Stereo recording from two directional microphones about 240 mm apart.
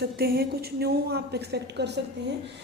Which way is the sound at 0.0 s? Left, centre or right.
Right.